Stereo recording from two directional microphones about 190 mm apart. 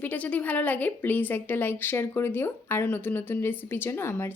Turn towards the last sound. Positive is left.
turn(degrees=10)  # may be behind; listen again after turning